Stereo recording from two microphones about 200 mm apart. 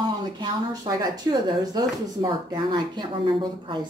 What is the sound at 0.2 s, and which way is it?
Speech, 20° right (ahead or behind).